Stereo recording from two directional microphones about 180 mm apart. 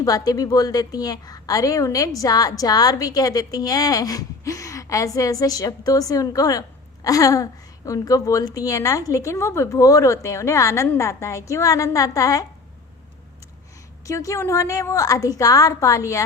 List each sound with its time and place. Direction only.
0.0 s a woman's voice: 20° left (ahead or behind)
14.0 s a woman's voice: 15° left (ahead or behind)